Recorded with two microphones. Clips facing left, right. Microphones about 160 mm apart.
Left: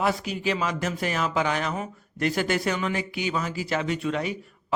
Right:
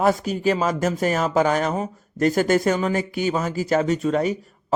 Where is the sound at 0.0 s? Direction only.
45° right (ahead or behind).